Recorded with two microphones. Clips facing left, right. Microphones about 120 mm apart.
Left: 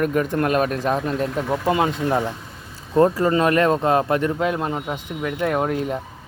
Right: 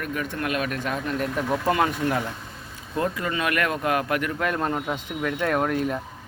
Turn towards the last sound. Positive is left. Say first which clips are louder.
# left 2 dB
turn(degrees=20)  # may be behind; listen again after turning